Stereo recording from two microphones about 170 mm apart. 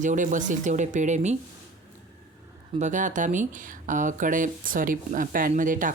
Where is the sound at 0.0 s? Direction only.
50° right (ahead or behind).